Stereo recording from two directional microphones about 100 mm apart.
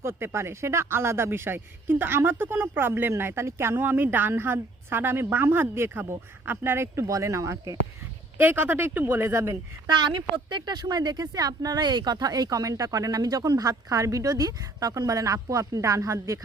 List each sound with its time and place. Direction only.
0.0 s speech: 25° right (ahead or behind)
8.4 s speech: 20° right (ahead or behind)
9.8 s speech: 50° right (ahead or behind); by 16.4 s 35° right (ahead or behind)